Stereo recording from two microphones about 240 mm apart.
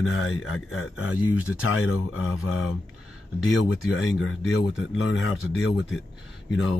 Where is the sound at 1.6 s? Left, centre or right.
Left.